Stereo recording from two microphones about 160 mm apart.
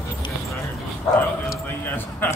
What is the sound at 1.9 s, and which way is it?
Speech, 10° left (ahead or behind).